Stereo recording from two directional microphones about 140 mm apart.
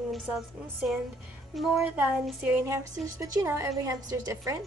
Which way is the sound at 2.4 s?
15° right (ahead or behind).